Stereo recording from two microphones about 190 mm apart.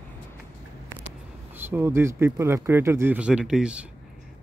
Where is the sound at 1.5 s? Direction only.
10° right (ahead or behind).